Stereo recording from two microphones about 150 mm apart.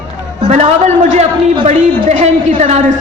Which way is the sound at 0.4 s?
55° right (ahead or behind).